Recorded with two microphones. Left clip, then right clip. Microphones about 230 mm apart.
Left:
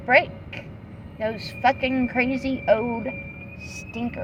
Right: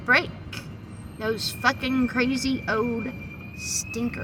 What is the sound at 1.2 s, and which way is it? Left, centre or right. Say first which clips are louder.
A woman's voice: left 2 dB; centre.